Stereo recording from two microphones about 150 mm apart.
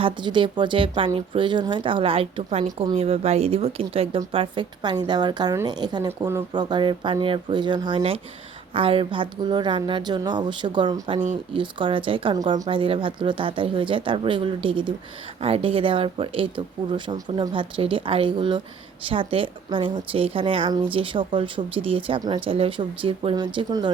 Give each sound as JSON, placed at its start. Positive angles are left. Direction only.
{"t": 0.0, "sound": "a woman's voice", "side_deg": -30}